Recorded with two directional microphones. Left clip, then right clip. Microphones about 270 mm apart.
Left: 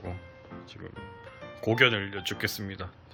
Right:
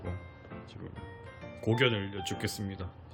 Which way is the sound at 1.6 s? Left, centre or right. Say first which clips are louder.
Left 5 dB; centre.